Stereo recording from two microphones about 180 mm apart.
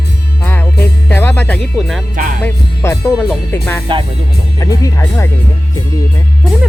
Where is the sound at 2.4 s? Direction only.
15° left (ahead or behind).